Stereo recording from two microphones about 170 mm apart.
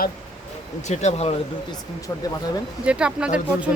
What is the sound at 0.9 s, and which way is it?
Speech, 40° left (ahead or behind).